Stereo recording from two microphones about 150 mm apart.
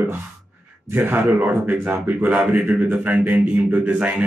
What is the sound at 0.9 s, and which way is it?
Speech, 15° right (ahead or behind).